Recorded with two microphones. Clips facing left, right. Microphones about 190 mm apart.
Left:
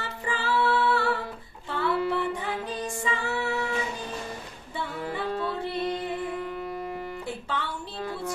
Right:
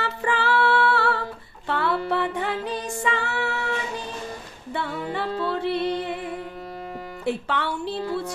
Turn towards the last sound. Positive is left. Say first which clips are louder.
# right 6 dB
turn(degrees=-70)  # may be behind; listen again after turning